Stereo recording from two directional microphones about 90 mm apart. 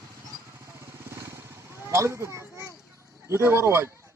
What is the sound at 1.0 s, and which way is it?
Vehicle, 30° right (ahead or behind).